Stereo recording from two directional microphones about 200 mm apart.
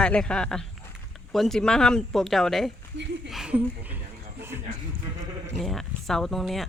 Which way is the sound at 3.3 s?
5° right (ahead or behind).